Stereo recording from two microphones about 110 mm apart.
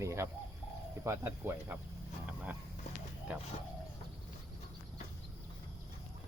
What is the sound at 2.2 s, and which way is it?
Vehicle, 15° right (ahead or behind).